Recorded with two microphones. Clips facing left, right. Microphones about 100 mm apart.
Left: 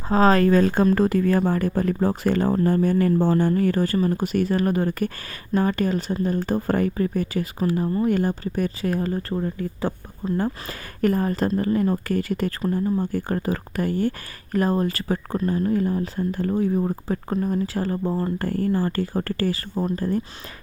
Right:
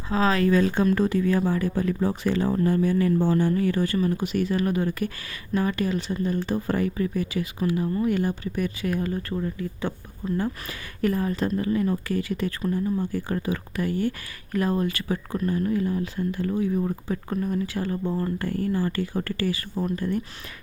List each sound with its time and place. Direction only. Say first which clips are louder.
0.1 s speech: left 4 dB; 40° left (ahead or behind)
15.4 s speech: left 2 dB; 30° left (ahead or behind)
15.7 s speech: left 3 dB; 40° left (ahead or behind)